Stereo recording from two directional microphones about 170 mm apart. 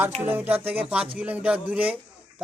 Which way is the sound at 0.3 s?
10° right (ahead or behind).